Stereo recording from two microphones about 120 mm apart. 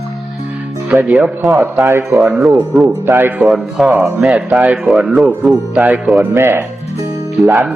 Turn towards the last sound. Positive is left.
turn(degrees=0)  # may be behind; listen again after turning